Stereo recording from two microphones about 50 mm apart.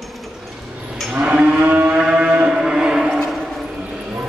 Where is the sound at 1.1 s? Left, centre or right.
Right.